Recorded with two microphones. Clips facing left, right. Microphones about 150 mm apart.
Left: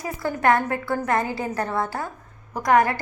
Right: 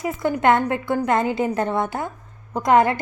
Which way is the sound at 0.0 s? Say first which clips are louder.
Right 3 dB; 20° right (ahead or behind).